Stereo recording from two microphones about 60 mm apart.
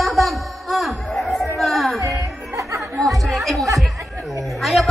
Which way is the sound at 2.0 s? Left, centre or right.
Right.